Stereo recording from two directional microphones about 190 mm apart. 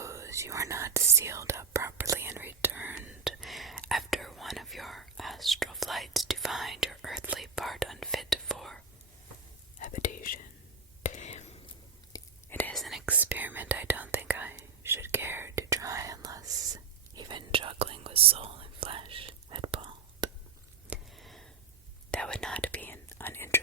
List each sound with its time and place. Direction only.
0.0 s whispering: 15° right (ahead or behind); by 8.8 s centre (ahead or behind)
9.7 s whispering: 40° left (ahead or behind)
12.1 s whispering: 10° left (ahead or behind); by 20.3 s 25° right (ahead or behind)
20.9 s a sound: centre (ahead or behind)
22.1 s whispering: 5° left (ahead or behind)